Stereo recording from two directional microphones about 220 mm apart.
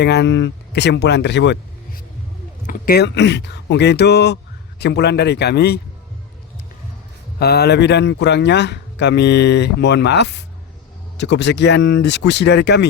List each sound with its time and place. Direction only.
0.0 s a man's voice: 50° left (ahead or behind)
2.6 s a man's voice: 40° left (ahead or behind)
7.3 s a man's voice: 45° left (ahead or behind)